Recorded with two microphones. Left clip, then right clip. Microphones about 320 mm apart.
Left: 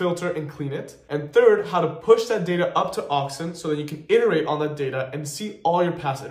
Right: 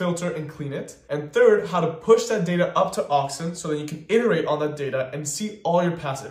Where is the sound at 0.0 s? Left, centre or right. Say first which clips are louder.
Left 2 dB; centre.